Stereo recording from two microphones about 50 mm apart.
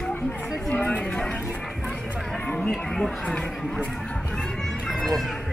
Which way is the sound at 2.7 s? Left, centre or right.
Centre.